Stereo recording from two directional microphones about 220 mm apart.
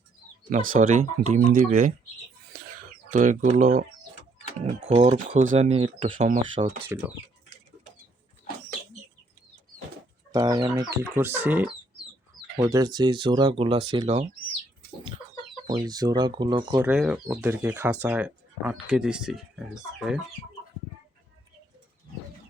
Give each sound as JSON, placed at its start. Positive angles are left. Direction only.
{"t": 0.5, "sound": "speech", "side_deg": -40}
{"t": 3.1, "sound": "speech", "side_deg": -35}
{"t": 4.4, "sound": "speech", "side_deg": -30}
{"t": 10.3, "sound": "speech", "side_deg": -20}
{"t": 15.7, "sound": "speech", "side_deg": -20}
{"t": 16.8, "sound": "speech", "side_deg": -5}